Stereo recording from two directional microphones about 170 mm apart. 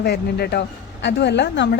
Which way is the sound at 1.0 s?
90° left.